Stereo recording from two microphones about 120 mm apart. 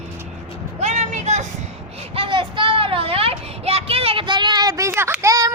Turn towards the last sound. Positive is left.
turn(degrees=-30)  # may be behind; listen again after turning